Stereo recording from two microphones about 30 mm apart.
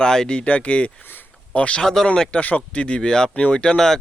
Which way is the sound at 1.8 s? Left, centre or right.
Centre.